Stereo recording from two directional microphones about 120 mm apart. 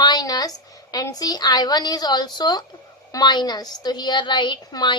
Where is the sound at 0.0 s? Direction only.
35° left (ahead or behind).